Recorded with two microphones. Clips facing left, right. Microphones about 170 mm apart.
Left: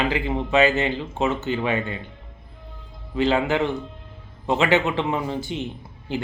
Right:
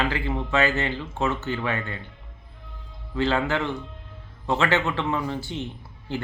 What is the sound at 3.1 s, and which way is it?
A man's voice, 15° left (ahead or behind).